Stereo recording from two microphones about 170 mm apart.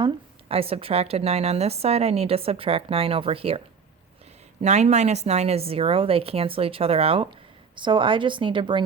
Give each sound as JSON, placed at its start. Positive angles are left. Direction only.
{"t": 0.0, "sound": "a woman's voice", "side_deg": -35}
{"t": 4.6, "sound": "a woman's voice", "side_deg": -40}